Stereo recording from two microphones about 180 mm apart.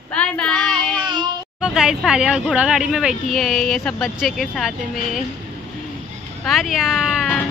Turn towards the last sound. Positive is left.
turn(degrees=-5)  # may be behind; listen again after turning